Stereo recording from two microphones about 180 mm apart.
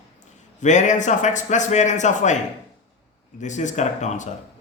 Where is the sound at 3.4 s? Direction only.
40° left (ahead or behind).